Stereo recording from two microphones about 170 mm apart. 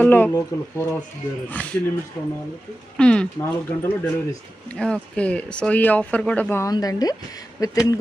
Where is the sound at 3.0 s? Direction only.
5° left (ahead or behind).